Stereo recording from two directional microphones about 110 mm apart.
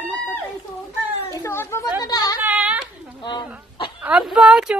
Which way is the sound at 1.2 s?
25° left (ahead or behind).